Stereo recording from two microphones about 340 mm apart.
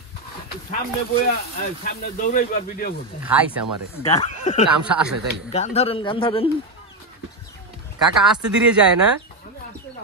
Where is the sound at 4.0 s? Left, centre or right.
Centre.